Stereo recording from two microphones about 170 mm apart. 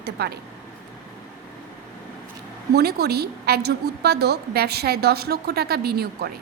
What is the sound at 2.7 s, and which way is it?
A woman's voice, 70° right (ahead or behind).